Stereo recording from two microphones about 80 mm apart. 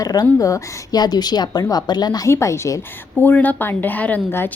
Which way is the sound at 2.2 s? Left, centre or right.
Left.